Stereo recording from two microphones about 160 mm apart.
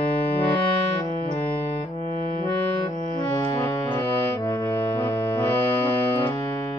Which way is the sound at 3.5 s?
15° left (ahead or behind).